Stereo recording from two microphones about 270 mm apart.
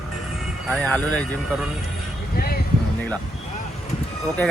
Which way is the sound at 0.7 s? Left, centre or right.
Centre.